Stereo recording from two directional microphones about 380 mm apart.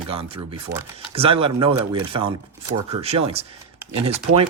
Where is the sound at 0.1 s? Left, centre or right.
Centre.